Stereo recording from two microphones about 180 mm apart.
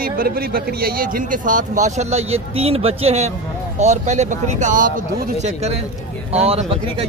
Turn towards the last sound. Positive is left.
turn(degrees=-35)  # may be behind; listen again after turning